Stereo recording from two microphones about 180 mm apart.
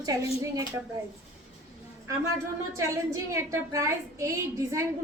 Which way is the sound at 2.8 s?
15° right (ahead or behind).